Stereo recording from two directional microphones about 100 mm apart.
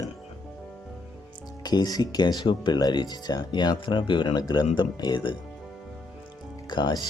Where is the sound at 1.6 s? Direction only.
40° left (ahead or behind).